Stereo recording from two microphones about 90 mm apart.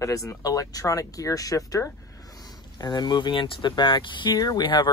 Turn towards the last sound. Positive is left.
turn(degrees=55)  # may be behind; listen again after turning